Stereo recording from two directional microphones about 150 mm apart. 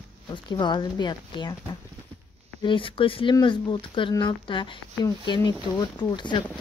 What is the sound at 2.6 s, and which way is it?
Speech, 35° left (ahead or behind).